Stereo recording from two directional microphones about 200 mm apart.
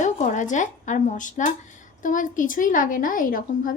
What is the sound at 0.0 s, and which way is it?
A woman's voice, 40° left (ahead or behind).